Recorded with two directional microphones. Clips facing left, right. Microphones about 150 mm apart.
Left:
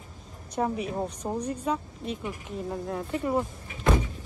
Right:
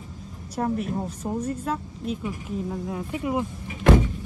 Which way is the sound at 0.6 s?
Centre (ahead or behind).